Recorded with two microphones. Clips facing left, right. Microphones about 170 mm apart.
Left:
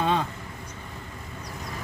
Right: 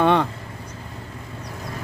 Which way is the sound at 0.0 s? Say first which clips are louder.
Right 7 dB; 65° right (ahead or behind).